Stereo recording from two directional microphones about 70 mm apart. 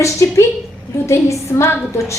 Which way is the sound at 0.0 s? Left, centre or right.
Left.